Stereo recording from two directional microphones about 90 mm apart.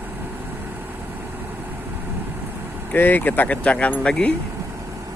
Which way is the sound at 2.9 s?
20° left (ahead or behind).